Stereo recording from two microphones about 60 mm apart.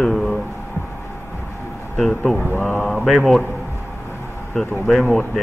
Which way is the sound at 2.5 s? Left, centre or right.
Left.